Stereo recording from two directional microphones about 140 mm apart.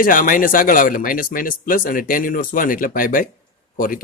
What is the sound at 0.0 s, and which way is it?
A man's voice, 75° left (ahead or behind).